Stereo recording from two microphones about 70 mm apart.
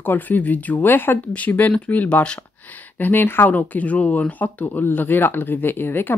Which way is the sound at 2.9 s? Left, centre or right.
Left.